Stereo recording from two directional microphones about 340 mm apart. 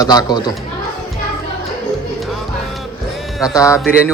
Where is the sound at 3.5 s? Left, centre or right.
Centre.